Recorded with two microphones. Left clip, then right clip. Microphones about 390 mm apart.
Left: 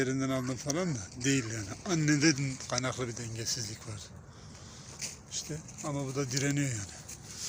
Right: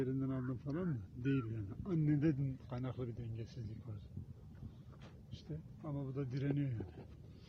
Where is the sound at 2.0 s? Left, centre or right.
Right.